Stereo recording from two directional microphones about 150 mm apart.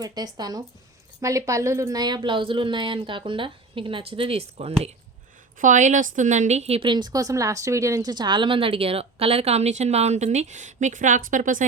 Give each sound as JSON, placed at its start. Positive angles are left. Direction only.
{"t": 0.0, "sound": "a woman's voice", "side_deg": -25}
{"t": 5.5, "sound": "a woman's voice", "side_deg": -55}